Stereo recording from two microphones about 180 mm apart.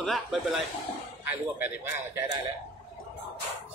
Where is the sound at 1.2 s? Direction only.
10° right (ahead or behind).